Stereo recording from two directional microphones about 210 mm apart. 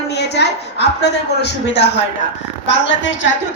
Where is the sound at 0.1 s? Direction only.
55° left (ahead or behind).